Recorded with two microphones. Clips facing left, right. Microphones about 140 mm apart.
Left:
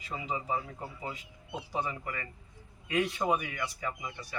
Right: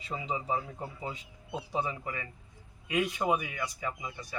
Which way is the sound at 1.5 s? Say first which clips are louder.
Right 2 dB; 30° right (ahead or behind).